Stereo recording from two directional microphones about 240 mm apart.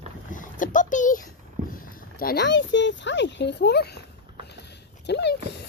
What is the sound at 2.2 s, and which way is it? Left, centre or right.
Speech, left.